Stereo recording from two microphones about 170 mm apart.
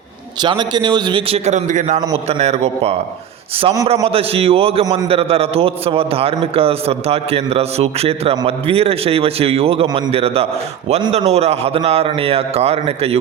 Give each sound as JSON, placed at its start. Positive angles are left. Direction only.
{"t": 0.4, "sound": "a man's voice", "side_deg": -25}
{"t": 1.5, "sound": "a man's voice", "side_deg": -45}
{"t": 3.6, "sound": "a man's voice", "side_deg": -25}
{"t": 4.0, "sound": "a man's voice", "side_deg": -35}